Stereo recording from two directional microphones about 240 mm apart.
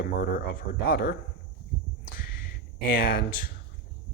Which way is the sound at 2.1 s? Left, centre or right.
Left.